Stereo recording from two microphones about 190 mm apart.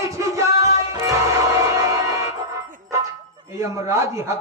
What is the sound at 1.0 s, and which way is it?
Music, 15° right (ahead or behind).